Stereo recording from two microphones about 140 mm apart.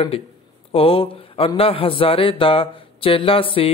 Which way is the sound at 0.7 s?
40° left (ahead or behind).